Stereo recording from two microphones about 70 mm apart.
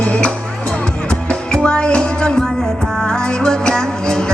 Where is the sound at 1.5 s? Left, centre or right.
Centre.